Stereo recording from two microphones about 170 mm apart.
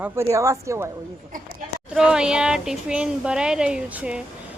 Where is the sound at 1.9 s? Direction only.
5° right (ahead or behind).